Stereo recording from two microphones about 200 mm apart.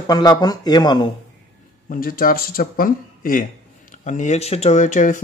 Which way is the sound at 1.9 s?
45° left (ahead or behind).